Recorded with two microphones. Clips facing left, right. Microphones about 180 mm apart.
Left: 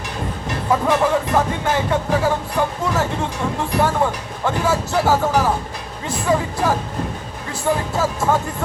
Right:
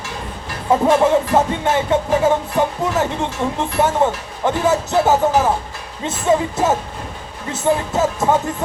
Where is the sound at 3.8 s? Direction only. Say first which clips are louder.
Right 2 dB; 20° right (ahead or behind).